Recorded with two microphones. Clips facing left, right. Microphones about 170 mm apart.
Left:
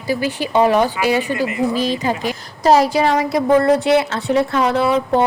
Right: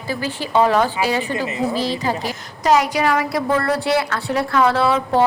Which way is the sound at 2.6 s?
35° left (ahead or behind).